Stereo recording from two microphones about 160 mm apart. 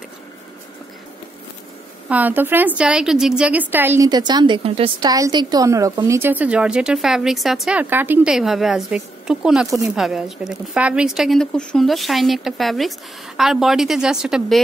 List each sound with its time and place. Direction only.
2.0 s a woman's voice: 10° right (ahead or behind)
4.1 s a woman's voice: 25° right (ahead or behind)
5.1 s speech: 25° right (ahead or behind); by 14.6 s 5° right (ahead or behind)